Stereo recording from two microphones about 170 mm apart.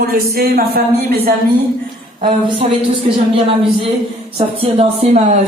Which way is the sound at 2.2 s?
30° right (ahead or behind).